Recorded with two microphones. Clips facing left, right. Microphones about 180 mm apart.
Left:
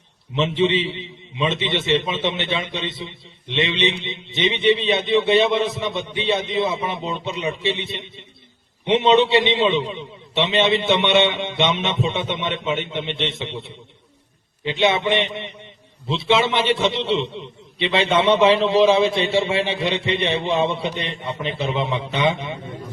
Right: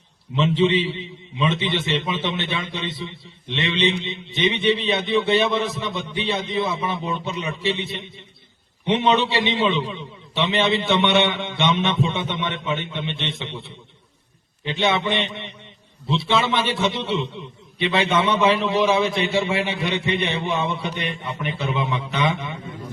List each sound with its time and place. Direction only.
0.3 s a man's voice: 20° left (ahead or behind)